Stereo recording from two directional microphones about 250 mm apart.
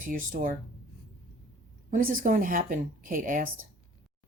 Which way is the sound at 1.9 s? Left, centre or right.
Right.